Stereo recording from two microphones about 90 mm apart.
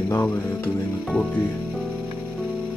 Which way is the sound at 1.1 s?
5° left (ahead or behind).